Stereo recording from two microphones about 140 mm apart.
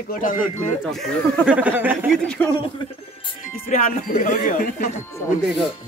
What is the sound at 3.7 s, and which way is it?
Music, 50° left (ahead or behind).